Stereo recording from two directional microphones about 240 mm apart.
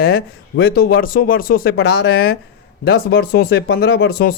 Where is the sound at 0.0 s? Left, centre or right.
Left.